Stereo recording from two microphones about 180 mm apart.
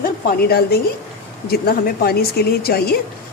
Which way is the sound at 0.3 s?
60° left (ahead or behind).